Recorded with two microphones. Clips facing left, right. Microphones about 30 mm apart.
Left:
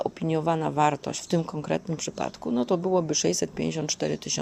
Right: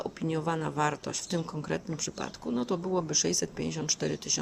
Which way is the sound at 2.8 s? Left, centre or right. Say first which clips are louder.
Left 6 dB; centre.